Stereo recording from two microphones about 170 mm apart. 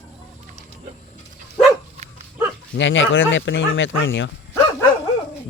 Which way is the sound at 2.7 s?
90° left.